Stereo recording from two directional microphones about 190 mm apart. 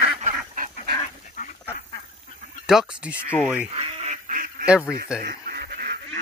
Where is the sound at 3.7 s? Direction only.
30° right (ahead or behind).